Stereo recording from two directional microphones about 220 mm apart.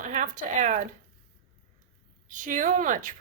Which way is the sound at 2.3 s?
35° right (ahead or behind).